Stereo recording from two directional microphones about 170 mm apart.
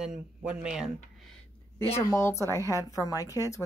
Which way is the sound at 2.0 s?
15° left (ahead or behind).